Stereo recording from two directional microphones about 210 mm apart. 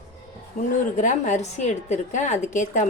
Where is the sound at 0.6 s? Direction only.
35° left (ahead or behind).